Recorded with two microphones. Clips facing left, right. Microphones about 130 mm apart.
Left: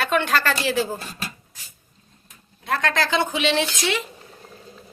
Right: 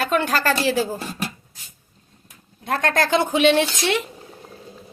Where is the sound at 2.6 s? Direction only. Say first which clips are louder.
Right 2 dB; 50° right (ahead or behind).